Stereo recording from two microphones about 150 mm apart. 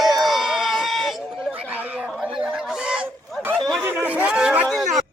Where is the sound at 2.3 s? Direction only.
5° right (ahead or behind).